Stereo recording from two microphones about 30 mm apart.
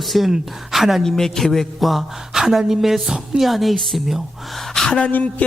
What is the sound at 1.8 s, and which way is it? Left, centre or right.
Speech, centre.